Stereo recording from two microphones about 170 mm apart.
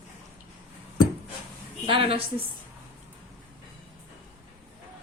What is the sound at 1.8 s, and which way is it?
Speech, 30° right (ahead or behind).